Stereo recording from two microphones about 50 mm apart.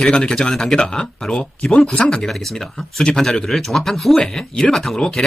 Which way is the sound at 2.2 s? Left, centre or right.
Centre.